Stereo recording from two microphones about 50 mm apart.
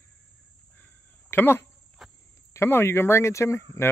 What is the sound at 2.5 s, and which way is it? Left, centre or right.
Speech, left.